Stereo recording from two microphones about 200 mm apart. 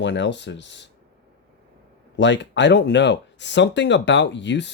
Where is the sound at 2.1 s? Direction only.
60° left (ahead or behind).